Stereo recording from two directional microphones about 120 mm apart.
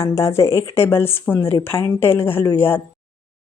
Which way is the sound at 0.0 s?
25° left (ahead or behind).